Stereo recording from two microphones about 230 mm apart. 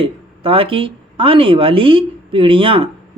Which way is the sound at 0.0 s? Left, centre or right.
Right.